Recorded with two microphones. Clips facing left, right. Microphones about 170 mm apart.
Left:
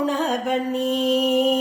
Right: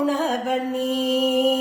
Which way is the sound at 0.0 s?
5° right (ahead or behind).